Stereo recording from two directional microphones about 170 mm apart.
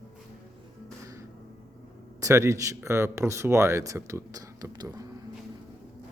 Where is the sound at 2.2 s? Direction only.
15° right (ahead or behind).